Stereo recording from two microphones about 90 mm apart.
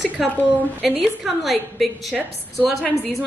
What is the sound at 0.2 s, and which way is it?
A woman's voice, centre (ahead or behind).